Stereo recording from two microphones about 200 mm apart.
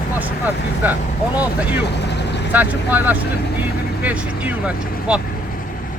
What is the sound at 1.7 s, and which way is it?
Vehicle, 60° left (ahead or behind).